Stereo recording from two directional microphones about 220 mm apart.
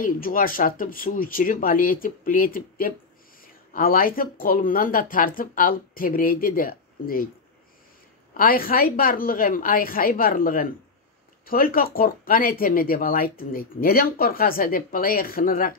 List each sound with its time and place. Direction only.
0.0 s speech: 40° left (ahead or behind)
8.4 s speech: 40° left (ahead or behind)